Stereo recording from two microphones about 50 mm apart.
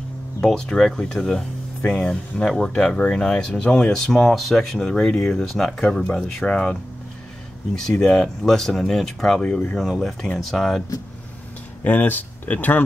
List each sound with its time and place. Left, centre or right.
0.4 s speech: centre
9.4 s speech: left
9.8 s speech: centre
11.8 s speech: left